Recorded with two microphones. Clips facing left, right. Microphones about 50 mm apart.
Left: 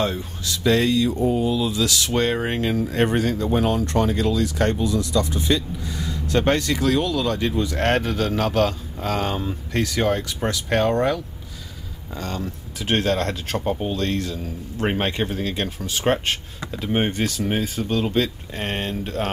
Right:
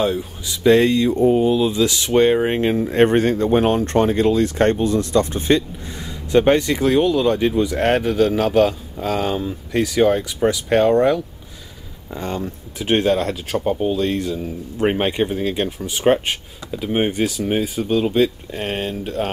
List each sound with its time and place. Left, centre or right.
0.0 s speech: centre
0.5 s speech: right; by 19.3 s centre